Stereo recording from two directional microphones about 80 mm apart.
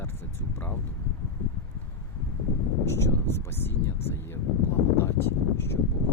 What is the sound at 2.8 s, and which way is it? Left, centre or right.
Speech, left.